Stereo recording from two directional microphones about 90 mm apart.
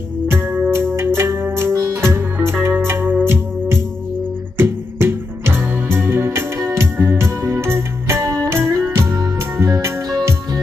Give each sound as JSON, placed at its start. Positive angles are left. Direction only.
{"t": 0.3, "sound": "music", "side_deg": -25}